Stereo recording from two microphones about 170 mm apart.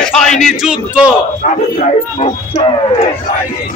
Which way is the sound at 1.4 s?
45° left (ahead or behind).